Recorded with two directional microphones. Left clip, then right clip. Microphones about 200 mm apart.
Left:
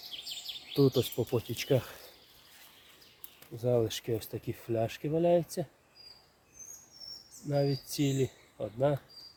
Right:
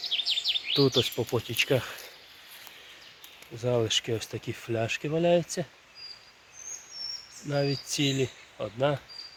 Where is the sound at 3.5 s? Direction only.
Centre (ahead or behind).